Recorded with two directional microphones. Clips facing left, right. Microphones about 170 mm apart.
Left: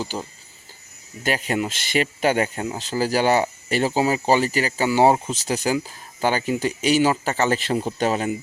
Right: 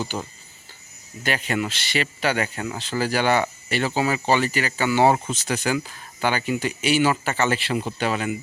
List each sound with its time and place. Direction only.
0.1 s speech: 15° left (ahead or behind)
1.2 s speech: 40° left (ahead or behind)
2.4 s speech: 25° left (ahead or behind)
2.7 s speech: 40° left (ahead or behind)